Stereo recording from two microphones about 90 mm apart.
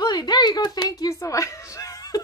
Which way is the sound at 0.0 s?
45° left (ahead or behind).